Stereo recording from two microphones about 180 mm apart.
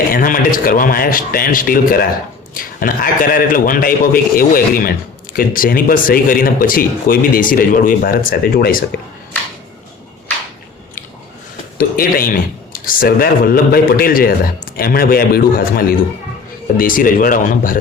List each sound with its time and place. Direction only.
0.1 s speech: 50° left (ahead or behind)
11.8 s speech: 55° left (ahead or behind)